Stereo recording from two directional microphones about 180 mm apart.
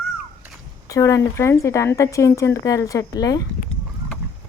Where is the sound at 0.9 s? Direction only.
20° left (ahead or behind).